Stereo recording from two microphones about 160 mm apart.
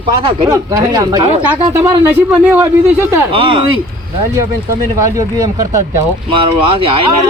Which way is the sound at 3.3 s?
30° right (ahead or behind).